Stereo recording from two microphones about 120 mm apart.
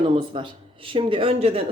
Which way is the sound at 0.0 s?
45° right (ahead or behind).